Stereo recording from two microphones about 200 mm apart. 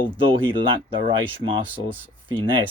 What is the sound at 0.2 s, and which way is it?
Speech, 25° right (ahead or behind).